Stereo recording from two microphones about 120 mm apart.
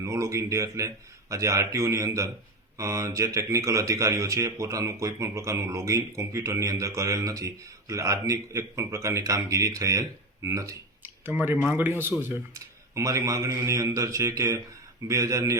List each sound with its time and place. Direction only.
0.0 s speech: 25° right (ahead or behind)
11.3 s speech: 15° right (ahead or behind)